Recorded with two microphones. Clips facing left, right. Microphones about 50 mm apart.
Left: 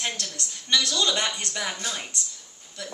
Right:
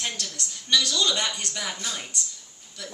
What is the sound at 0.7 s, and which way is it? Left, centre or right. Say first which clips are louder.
Speech: even; left.